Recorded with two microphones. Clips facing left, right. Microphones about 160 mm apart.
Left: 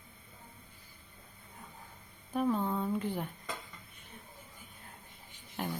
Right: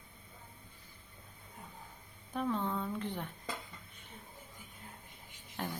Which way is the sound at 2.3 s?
10° left (ahead or behind).